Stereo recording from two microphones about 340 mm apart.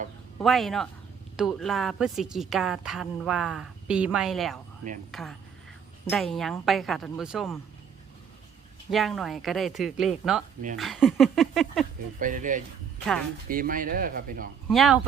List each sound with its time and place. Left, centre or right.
0.3 s a woman's voice: centre
8.9 s a woman's voice: centre
12.2 s speech: right
14.7 s a woman's voice: centre